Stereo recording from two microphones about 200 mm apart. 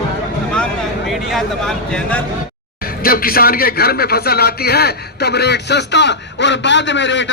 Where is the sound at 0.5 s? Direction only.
Centre (ahead or behind).